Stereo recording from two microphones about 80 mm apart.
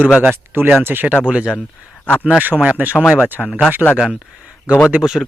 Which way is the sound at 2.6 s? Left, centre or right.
Centre.